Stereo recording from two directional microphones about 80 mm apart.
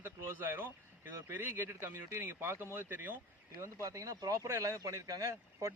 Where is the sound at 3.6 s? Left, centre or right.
Right.